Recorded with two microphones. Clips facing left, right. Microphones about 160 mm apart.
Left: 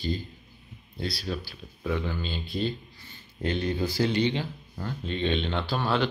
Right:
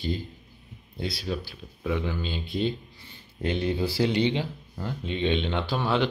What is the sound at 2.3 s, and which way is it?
Speech, 20° right (ahead or behind).